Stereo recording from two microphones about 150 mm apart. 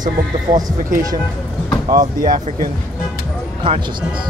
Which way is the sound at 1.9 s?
65° right (ahead or behind).